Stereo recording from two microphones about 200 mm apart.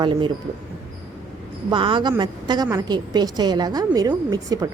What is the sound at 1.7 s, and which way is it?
A woman's voice, 25° right (ahead or behind).